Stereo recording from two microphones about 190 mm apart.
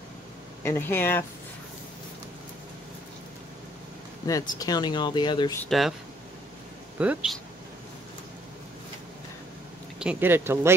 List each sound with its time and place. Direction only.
0.7 s speech: 15° left (ahead or behind)
4.3 s speech: 20° left (ahead or behind)
5.6 s speech: centre (ahead or behind)
7.0 s speech: 5° right (ahead or behind)
9.9 s speech: 10° right (ahead or behind)